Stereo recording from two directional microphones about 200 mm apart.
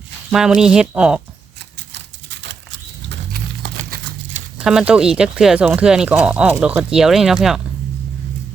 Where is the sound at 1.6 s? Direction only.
60° right (ahead or behind).